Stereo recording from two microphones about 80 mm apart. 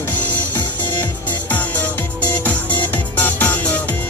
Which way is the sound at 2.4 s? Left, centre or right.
Centre.